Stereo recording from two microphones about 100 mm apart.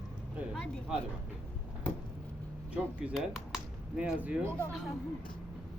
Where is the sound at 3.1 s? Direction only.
Centre (ahead or behind).